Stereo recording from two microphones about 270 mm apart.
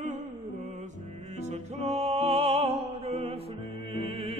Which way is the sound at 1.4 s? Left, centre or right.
Right.